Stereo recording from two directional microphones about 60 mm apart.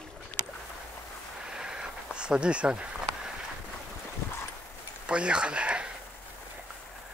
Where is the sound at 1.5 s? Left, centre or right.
Centre.